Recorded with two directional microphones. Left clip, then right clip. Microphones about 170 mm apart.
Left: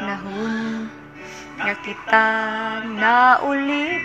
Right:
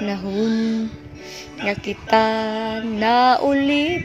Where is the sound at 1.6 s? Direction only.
70° right (ahead or behind).